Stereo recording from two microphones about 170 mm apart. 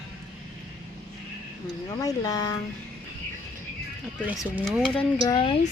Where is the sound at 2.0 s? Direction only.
20° left (ahead or behind).